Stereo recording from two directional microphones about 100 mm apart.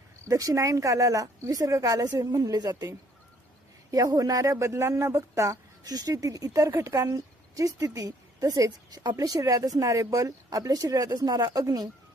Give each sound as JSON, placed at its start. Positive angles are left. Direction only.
{"t": 0.3, "sound": "speech", "side_deg": -35}
{"t": 3.9, "sound": "speech", "side_deg": -35}